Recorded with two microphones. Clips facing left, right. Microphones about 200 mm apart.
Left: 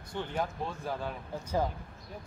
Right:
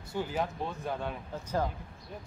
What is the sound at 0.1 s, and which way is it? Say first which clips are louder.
Speech: right 2 dB; 5° right (ahead or behind).